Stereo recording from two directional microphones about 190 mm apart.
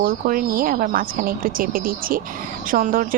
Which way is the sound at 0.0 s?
50° right (ahead or behind).